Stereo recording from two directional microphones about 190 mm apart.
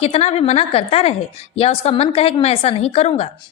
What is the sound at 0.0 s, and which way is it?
A woman's voice, 35° left (ahead or behind).